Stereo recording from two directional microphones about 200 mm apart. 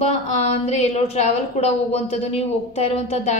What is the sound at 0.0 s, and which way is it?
A woman's voice, 30° left (ahead or behind).